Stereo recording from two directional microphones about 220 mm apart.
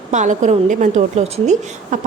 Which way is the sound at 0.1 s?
35° right (ahead or behind).